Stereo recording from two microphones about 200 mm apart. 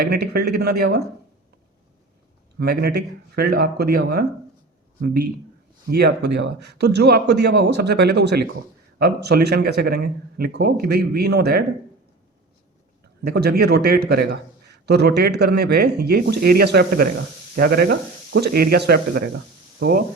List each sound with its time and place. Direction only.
0.0 s speech: 50° right (ahead or behind)
2.6 s a man's voice: 50° right (ahead or behind)
13.2 s speech: 50° right (ahead or behind)